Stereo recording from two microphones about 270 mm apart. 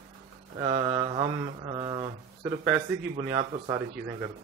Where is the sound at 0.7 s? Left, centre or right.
Centre.